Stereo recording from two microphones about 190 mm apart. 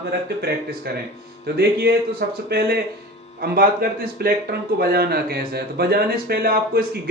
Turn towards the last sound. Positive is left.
turn(degrees=-50)  # may be behind; listen again after turning